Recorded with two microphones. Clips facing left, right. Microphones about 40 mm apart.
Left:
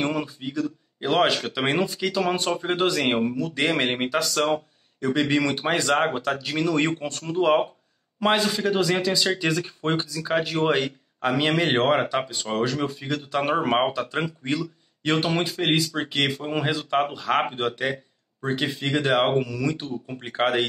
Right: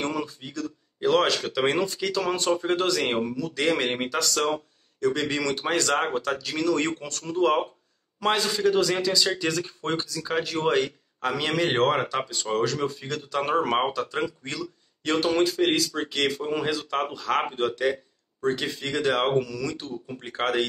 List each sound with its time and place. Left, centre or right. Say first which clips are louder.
0.0 s speech: left 3 dB; centre